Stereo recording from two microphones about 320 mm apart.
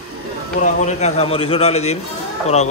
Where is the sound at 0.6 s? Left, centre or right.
Left.